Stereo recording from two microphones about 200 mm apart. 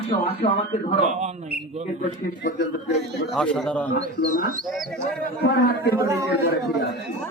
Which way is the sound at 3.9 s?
50° left (ahead or behind).